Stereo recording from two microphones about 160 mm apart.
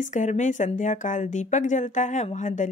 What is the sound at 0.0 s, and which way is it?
Speech, 50° left (ahead or behind).